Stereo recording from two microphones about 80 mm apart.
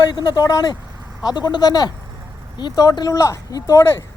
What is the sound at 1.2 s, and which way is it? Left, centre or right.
Speech, left.